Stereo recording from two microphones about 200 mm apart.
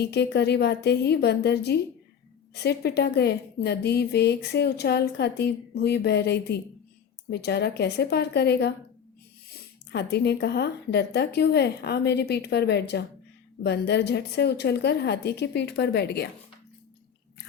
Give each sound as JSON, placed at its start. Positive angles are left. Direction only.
{"t": 0.0, "sound": "a woman's voice", "side_deg": 55}
{"t": 9.9, "sound": "a woman's voice", "side_deg": 55}